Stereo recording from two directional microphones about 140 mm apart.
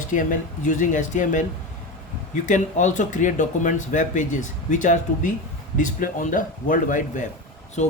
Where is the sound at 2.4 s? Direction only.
65° left (ahead or behind).